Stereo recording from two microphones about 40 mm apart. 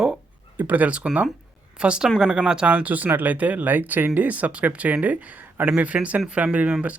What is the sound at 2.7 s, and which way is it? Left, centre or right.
Speech, right.